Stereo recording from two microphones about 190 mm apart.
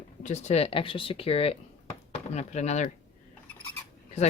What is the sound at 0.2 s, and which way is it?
Speech, 40° left (ahead or behind).